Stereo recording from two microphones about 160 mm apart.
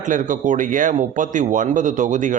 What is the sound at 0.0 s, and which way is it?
Speech, 55° right (ahead or behind).